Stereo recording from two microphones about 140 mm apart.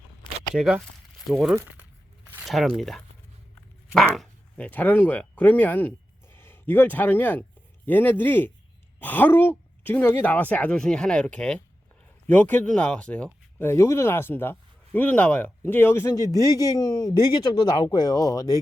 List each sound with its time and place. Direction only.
0.5 s speech: 5° right (ahead or behind); by 18.6 s 25° left (ahead or behind)